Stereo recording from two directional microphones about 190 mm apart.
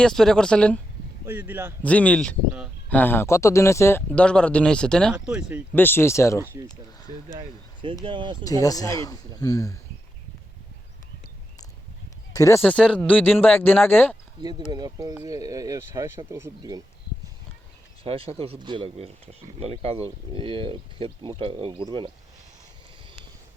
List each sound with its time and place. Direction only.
0.0 s speech: centre (ahead or behind)
1.2 s speech: 10° right (ahead or behind)
1.8 s speech: 5° left (ahead or behind)
5.7 s speech: 10° left (ahead or behind)
6.4 s speech: 10° right (ahead or behind)
7.3 s speech: 25° right (ahead or behind)
8.4 s a man's voice: 20° left (ahead or behind)
12.3 s speech: 15° left (ahead or behind)
12.6 s speech: 5° left (ahead or behind)
14.7 s speech: 20° right (ahead or behind)
18.0 s speech: 30° right (ahead or behind)